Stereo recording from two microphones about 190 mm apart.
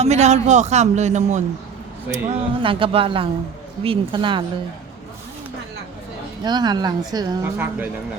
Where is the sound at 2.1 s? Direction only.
25° right (ahead or behind).